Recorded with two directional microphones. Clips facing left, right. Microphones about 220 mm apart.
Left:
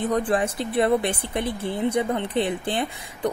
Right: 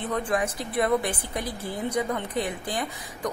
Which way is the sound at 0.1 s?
35° left (ahead or behind).